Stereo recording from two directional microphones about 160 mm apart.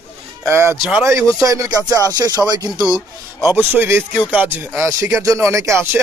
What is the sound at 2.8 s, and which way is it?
Speech, 5° right (ahead or behind).